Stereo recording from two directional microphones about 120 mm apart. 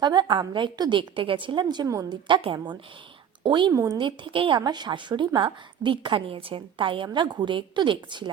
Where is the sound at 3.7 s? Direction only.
25° right (ahead or behind).